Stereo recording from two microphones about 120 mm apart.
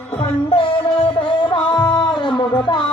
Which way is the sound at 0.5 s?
45° left (ahead or behind).